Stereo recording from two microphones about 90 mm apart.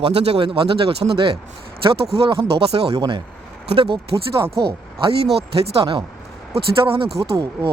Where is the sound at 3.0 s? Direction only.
60° right (ahead or behind).